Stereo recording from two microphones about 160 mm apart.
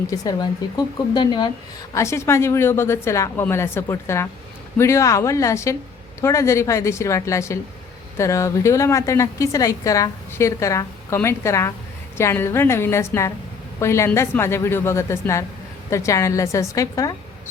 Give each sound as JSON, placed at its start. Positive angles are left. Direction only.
{"t": 0.1, "sound": "a woman's voice", "side_deg": 25}
{"t": 1.9, "sound": "a woman's voice", "side_deg": 20}